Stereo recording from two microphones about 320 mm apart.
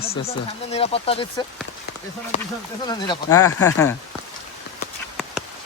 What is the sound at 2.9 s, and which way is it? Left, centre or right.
Speech, centre.